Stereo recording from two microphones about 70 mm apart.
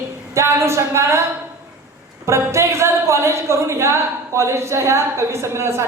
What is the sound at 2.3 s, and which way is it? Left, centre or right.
A woman's voice, right.